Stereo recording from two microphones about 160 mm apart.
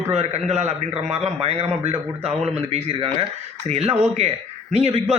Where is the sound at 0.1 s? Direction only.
45° right (ahead or behind).